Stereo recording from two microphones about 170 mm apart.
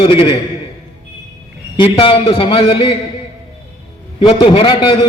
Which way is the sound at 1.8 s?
30° left (ahead or behind).